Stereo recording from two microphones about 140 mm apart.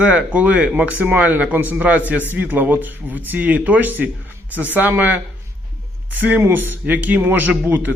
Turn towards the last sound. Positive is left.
turn(degrees=-10)  # may be behind; listen again after turning